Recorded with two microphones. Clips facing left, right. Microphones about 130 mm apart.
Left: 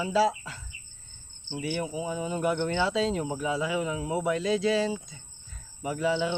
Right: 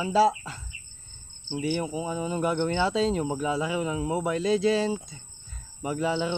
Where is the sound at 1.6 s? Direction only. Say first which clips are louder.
Right 3 dB; 25° right (ahead or behind).